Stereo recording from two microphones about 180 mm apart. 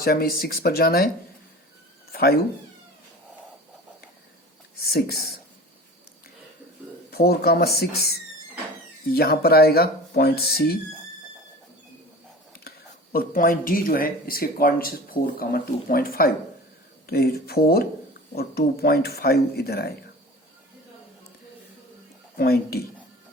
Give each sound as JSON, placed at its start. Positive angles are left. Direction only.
{"t": 0.0, "sound": "speech", "side_deg": 55}
{"t": 2.1, "sound": "speech", "side_deg": 60}
{"t": 4.8, "sound": "speech", "side_deg": 60}
{"t": 7.1, "sound": "speech", "side_deg": 60}
{"t": 13.1, "sound": "speech", "side_deg": 50}
{"t": 22.4, "sound": "speech", "side_deg": 60}